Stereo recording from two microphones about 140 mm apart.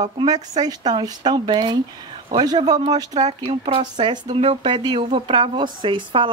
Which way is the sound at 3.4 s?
40° right (ahead or behind).